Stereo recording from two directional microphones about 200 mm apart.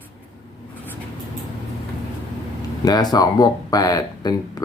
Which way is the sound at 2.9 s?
20° left (ahead or behind).